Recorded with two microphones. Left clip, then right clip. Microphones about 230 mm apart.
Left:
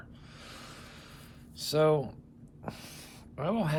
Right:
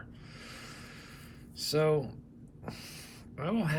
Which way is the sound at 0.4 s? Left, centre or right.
Centre.